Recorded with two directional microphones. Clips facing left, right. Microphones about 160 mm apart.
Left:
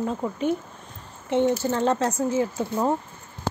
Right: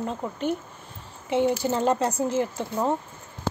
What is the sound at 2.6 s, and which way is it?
Speech, 5° left (ahead or behind).